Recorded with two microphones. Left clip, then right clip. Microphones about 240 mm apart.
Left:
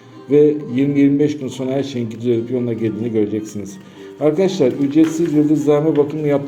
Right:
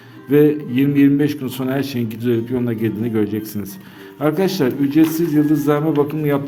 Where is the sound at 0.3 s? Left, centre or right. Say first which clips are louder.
Left 1 dB; right.